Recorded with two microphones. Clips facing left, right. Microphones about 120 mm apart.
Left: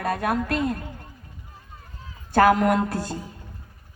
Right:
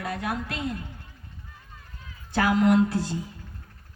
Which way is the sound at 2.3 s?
50° left (ahead or behind).